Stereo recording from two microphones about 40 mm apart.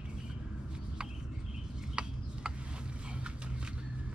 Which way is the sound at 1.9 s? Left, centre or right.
Centre.